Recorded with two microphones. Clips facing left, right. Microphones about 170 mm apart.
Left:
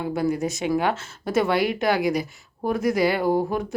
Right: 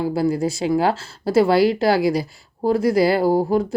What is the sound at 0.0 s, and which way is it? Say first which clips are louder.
Speech: right 4 dB; 30° right (ahead or behind).